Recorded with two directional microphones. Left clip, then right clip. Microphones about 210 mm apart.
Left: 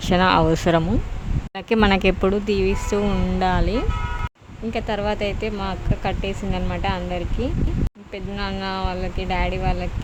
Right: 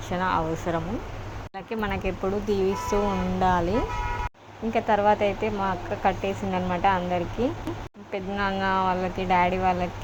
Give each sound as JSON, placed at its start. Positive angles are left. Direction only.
{"t": 0.1, "sound": "speech", "side_deg": 50}
{"t": 2.5, "sound": "speech", "side_deg": 25}
{"t": 4.7, "sound": "speech", "side_deg": 15}